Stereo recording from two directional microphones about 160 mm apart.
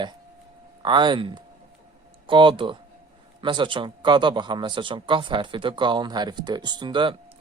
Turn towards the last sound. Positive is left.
turn(degrees=-30)  # may be behind; listen again after turning